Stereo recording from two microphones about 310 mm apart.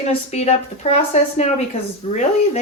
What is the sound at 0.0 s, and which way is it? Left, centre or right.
Speech, left.